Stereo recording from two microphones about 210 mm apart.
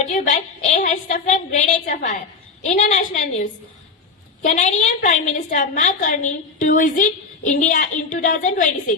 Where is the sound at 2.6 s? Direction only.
35° left (ahead or behind).